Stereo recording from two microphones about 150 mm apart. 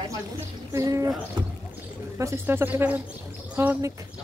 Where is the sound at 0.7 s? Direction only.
20° right (ahead or behind).